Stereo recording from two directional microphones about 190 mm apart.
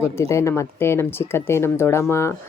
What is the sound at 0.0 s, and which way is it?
Speech, 15° left (ahead or behind).